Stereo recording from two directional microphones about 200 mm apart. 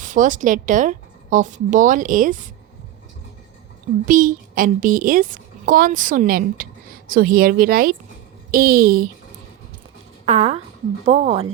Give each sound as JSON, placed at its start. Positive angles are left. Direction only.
{"t": 0.0, "sound": "a woman's voice", "side_deg": -40}
{"t": 4.0, "sound": "a woman's voice", "side_deg": -40}
{"t": 10.2, "sound": "a woman's voice", "side_deg": -35}